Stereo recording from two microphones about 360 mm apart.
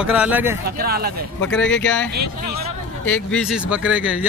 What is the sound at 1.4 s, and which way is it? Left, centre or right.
Speech, centre.